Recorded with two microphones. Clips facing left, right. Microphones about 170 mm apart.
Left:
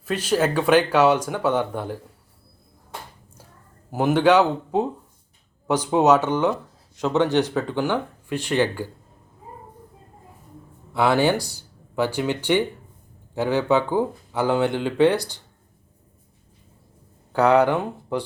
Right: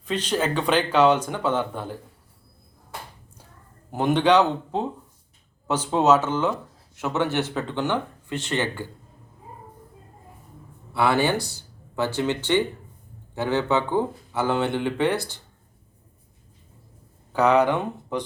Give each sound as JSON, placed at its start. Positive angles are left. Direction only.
{"t": 0.0, "sound": "speech", "side_deg": 10}
{"t": 3.9, "sound": "speech", "side_deg": 5}
{"t": 10.9, "sound": "speech", "side_deg": 15}
{"t": 17.3, "sound": "speech", "side_deg": 10}